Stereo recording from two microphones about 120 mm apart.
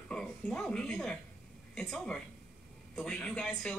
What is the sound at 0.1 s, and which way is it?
A man's voice, 5° left (ahead or behind).